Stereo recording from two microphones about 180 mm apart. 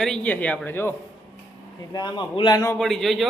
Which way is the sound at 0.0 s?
5° left (ahead or behind).